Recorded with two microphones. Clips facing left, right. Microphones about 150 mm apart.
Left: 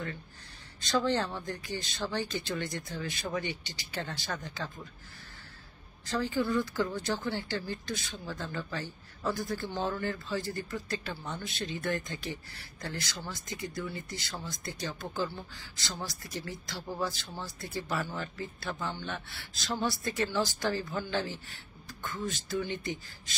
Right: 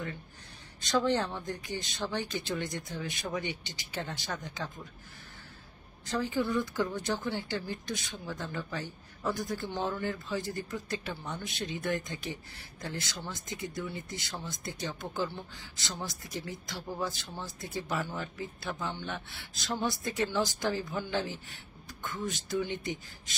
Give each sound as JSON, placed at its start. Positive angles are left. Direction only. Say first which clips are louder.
{"t": 0.7, "sound": "speech", "louder": "right 1 dB", "side_deg": -15}
{"t": 6.0, "sound": "speech", "louder": "even", "side_deg": -20}